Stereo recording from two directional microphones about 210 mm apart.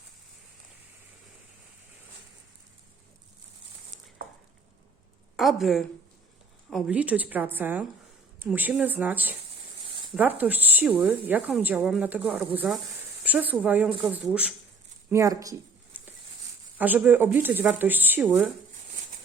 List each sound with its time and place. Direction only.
5.4 s a woman's voice: centre (ahead or behind)